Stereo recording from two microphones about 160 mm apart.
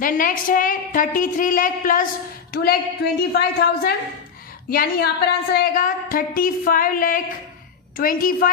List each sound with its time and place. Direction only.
0.0 s a woman's voice: 60° left (ahead or behind)
2.5 s a woman's voice: 75° left (ahead or behind)
4.7 s a woman's voice: 75° left (ahead or behind); by 8.4 s 60° left (ahead or behind)